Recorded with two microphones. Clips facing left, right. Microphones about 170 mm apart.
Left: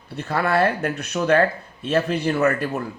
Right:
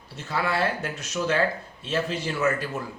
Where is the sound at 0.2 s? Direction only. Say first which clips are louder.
Left 6 dB; 60° left (ahead or behind).